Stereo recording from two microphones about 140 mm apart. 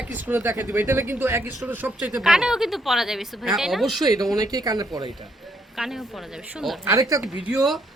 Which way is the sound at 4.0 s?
25° right (ahead or behind).